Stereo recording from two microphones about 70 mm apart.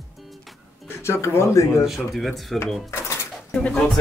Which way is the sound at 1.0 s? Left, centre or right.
Left.